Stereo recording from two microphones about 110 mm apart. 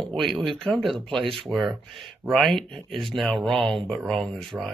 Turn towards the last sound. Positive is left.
turn(degrees=5)  # may be behind; listen again after turning